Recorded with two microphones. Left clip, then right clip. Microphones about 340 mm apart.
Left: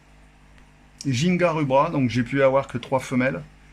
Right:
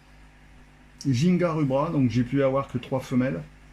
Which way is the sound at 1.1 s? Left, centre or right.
Left.